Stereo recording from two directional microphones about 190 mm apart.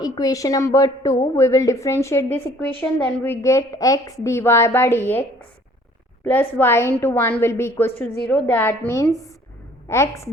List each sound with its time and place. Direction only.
0.0 s a woman's voice: 20° left (ahead or behind)
6.2 s a woman's voice: 10° left (ahead or behind)